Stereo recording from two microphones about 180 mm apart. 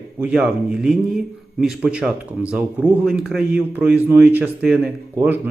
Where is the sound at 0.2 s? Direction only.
5° right (ahead or behind).